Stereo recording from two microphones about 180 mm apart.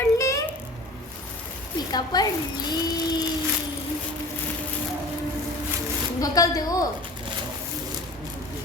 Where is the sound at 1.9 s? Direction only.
20° left (ahead or behind).